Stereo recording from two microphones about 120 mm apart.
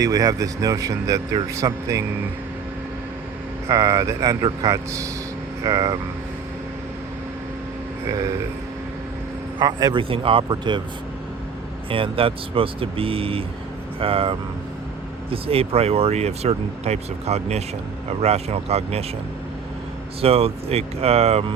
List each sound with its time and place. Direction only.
0.0 s a man's voice: 30° right (ahead or behind)
3.7 s a man's voice: 25° right (ahead or behind)
9.6 s speech: 35° right (ahead or behind)
11.9 s speech: 50° right (ahead or behind)
20.2 s speech: 55° right (ahead or behind)